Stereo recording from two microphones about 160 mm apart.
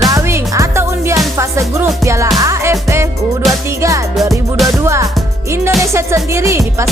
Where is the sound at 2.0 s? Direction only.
20° right (ahead or behind).